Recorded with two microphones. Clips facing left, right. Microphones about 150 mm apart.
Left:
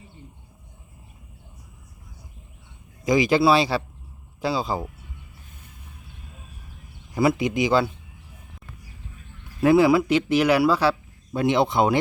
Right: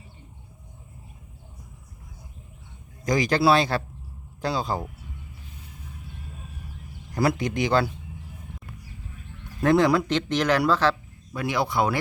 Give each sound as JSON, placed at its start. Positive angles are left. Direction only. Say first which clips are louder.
{"t": 3.0, "sound": "speech", "louder": "left 3 dB", "side_deg": 5}
{"t": 7.1, "sound": "speech", "louder": "left 3 dB", "side_deg": 0}
{"t": 9.6, "sound": "speech", "louder": "left 3 dB", "side_deg": 5}
{"t": 11.3, "sound": "speech", "louder": "left 5 dB", "side_deg": 25}